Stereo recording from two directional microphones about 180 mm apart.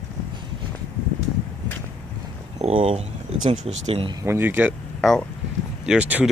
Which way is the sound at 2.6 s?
35° right (ahead or behind).